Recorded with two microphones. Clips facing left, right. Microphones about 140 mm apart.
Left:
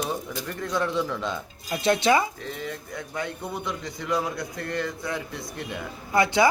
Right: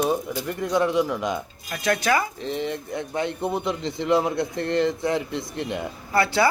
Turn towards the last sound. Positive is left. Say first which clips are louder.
# even
turn(degrees=15)  # may be behind; listen again after turning